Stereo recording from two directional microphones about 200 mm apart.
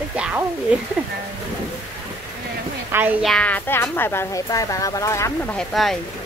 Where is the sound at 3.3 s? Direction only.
5° left (ahead or behind).